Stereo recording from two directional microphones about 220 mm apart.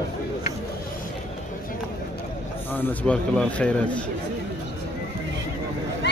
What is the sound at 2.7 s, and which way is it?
A man's voice, 5° left (ahead or behind).